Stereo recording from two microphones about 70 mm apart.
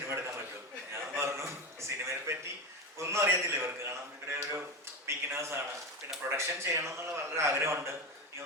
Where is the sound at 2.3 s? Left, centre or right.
Right.